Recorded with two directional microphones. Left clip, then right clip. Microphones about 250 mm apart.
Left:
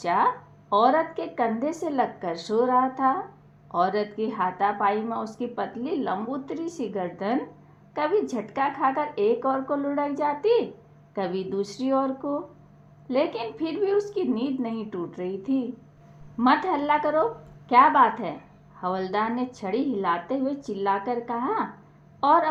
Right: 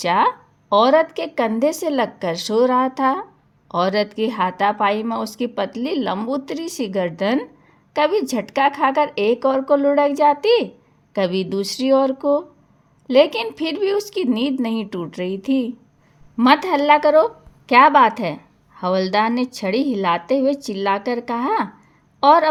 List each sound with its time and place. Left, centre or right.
0.0 s a woman's voice: right